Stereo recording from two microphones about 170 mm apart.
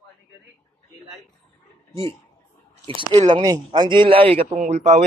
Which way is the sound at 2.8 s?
30° right (ahead or behind).